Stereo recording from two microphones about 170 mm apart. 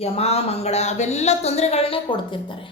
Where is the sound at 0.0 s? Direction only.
35° left (ahead or behind).